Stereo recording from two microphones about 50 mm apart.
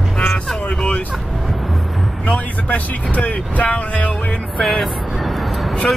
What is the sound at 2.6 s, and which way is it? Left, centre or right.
Speech, left.